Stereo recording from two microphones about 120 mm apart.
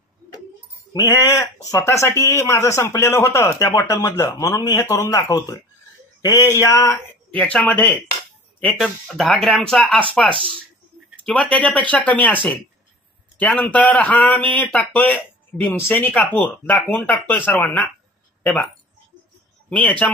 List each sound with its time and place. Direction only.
0.9 s speech: 20° left (ahead or behind)
7.3 s a man's voice: 10° left (ahead or behind)
11.5 s a man's voice: 10° left (ahead or behind)
19.7 s a man's voice: 10° left (ahead or behind)